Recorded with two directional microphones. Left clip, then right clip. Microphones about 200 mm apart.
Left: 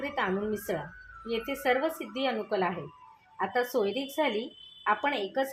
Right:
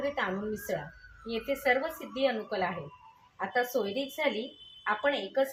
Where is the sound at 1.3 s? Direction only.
40° left (ahead or behind).